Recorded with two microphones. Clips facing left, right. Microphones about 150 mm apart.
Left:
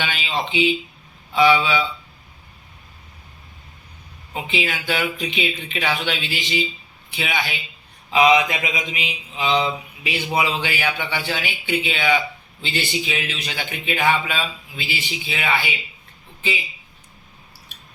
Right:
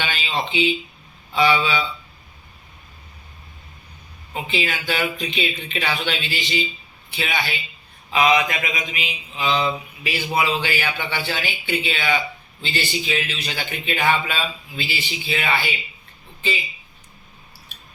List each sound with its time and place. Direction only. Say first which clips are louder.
0.0 s a sound: even; 10° left (ahead or behind)
1.3 s speech: left 2 dB; 10° left (ahead or behind)
4.4 s speech: left 1 dB; 15° left (ahead or behind)
8.1 s mantra: left 2 dB; 20° left (ahead or behind)
9.3 s speech: left 1 dB; 20° left (ahead or behind)